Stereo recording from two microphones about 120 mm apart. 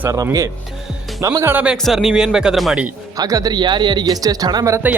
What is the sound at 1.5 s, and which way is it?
Speech, 10° right (ahead or behind).